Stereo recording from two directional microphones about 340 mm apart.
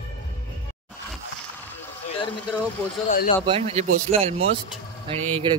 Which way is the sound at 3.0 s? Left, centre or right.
Left.